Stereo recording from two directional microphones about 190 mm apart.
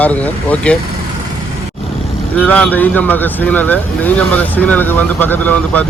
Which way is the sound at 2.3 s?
10° left (ahead or behind).